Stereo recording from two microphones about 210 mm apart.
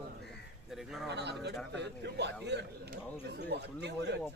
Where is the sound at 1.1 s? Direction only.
55° right (ahead or behind).